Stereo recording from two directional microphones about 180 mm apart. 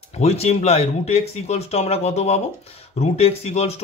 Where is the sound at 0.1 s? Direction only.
35° left (ahead or behind).